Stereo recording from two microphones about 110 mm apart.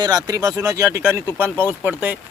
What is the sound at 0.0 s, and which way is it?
Speech, 35° right (ahead or behind).